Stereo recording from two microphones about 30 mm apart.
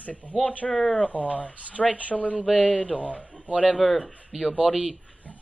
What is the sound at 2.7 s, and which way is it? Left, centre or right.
Speech, left.